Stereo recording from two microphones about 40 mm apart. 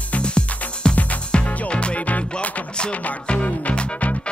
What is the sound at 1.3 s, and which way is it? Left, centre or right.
Music, left.